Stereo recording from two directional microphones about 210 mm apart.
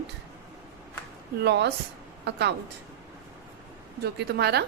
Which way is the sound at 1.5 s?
55° right (ahead or behind).